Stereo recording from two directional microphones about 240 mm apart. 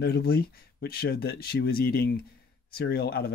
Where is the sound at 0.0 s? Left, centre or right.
Left.